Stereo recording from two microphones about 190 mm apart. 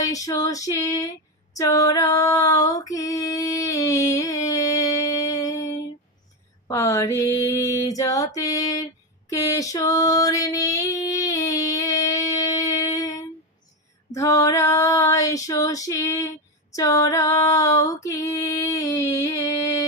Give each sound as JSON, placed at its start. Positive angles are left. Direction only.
{"t": 0.0, "sound": "female singing", "side_deg": 15}